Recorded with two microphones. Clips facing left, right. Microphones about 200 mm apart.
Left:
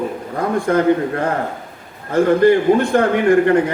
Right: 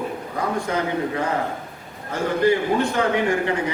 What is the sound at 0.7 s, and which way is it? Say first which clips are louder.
A man's voice: left 8 dB; 55° left (ahead or behind).